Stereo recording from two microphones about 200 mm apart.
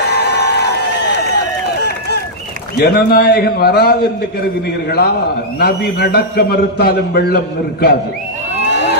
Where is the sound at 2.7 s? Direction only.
50° left (ahead or behind).